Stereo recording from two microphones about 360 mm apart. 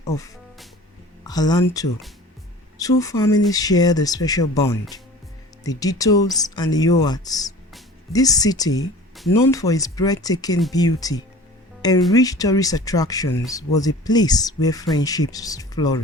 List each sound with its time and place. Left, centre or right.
1.2 s speech: centre